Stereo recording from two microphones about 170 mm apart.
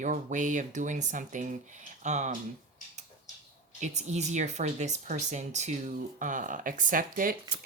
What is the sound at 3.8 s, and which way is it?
Speech, 45° right (ahead or behind).